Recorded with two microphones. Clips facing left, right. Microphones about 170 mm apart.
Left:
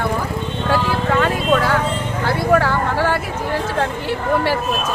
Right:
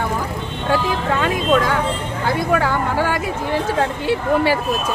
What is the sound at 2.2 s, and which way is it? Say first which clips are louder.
Speech: left 2 dB; 15° right (ahead or behind).